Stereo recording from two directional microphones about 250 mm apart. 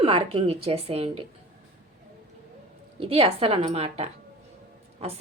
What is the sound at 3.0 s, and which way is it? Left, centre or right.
A woman's voice, right.